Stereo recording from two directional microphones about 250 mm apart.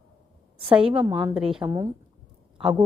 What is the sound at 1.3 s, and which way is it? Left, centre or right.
Speech, centre.